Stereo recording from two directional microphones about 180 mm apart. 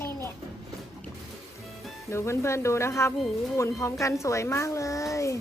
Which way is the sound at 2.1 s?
15° left (ahead or behind).